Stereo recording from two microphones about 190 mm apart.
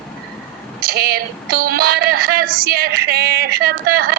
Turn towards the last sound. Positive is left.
turn(degrees=-50)  # may be behind; listen again after turning